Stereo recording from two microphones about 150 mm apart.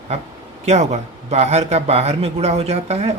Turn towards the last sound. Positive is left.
turn(degrees=-45)  # may be behind; listen again after turning